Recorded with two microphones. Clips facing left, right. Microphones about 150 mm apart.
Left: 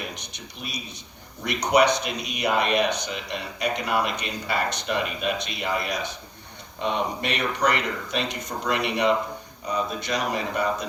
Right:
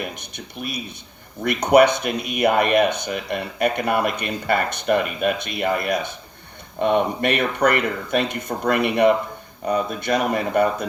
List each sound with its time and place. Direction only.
0.0 s speech: 55° right (ahead or behind)